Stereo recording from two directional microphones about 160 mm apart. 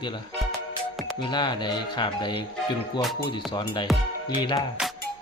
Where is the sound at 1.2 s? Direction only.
30° left (ahead or behind).